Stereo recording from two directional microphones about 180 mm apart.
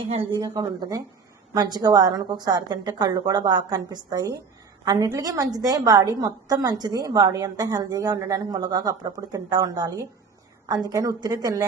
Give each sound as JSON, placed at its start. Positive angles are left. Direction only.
{"t": 0.1, "sound": "a woman's voice", "side_deg": -30}